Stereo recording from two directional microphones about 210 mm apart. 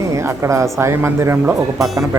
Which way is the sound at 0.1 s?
15° right (ahead or behind).